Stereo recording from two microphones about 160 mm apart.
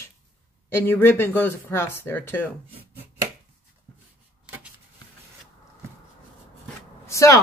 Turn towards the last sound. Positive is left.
turn(degrees=20)  # may be behind; listen again after turning